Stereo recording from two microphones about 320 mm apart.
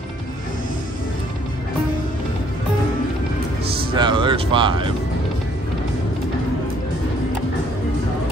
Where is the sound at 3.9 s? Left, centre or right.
Centre.